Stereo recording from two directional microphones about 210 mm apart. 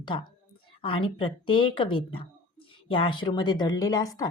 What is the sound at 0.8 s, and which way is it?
A woman's voice, 25° left (ahead or behind).